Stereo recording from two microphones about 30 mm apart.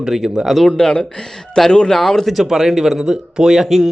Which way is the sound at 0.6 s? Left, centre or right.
Left.